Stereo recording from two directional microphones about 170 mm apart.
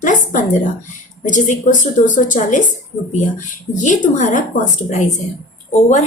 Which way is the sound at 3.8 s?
45° left (ahead or behind).